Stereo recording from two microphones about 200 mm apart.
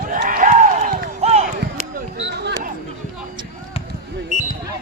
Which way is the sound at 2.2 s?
60° right (ahead or behind).